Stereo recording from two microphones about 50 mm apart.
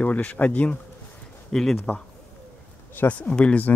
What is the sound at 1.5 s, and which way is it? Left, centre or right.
Speech, centre.